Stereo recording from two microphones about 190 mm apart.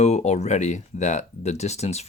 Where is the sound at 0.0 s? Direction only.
35° left (ahead or behind).